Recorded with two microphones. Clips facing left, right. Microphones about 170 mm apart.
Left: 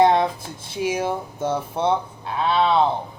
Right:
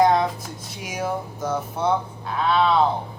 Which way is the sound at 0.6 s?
30° left (ahead or behind).